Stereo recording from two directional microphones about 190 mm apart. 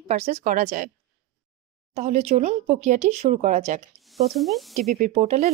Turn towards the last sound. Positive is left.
turn(degrees=-35)  # may be behind; listen again after turning